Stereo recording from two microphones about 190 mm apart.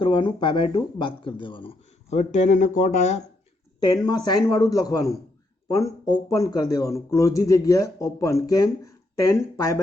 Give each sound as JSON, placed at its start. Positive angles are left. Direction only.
{"t": 0.0, "sound": "speech", "side_deg": 25}
{"t": 3.8, "sound": "speech", "side_deg": 20}